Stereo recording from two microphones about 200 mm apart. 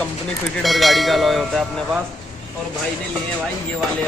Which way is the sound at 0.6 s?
Centre (ahead or behind).